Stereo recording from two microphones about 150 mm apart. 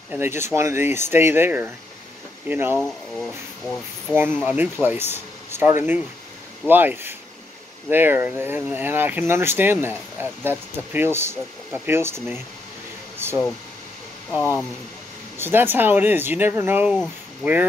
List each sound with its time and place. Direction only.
0.1 s speech: 15° right (ahead or behind)
2.8 s speech: 5° left (ahead or behind)
4.1 s speech: 15° right (ahead or behind)
13.2 s a sound: 15° right (ahead or behind)
15.3 s speech: 15° right (ahead or behind)
16.9 s speech: 5° left (ahead or behind)